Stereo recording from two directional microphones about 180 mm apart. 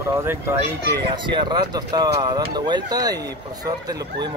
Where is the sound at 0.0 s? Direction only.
15° right (ahead or behind).